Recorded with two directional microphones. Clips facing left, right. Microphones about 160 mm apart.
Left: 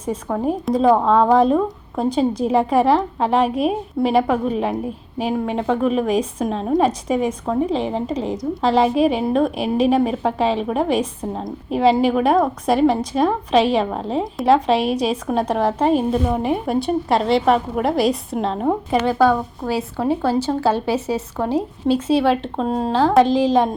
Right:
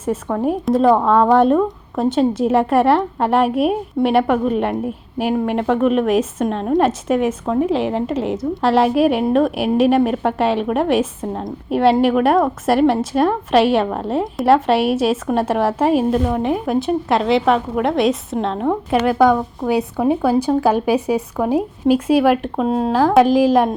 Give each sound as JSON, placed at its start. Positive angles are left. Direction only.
{"t": 0.0, "sound": "a woman's voice", "side_deg": 0}
{"t": 19.2, "sound": "speech", "side_deg": -15}